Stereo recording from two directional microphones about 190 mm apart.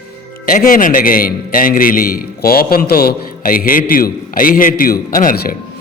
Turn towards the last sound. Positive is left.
turn(degrees=45)  # may be behind; listen again after turning